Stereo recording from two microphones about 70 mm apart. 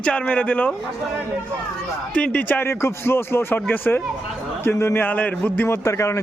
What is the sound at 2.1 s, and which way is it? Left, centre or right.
Speech, centre.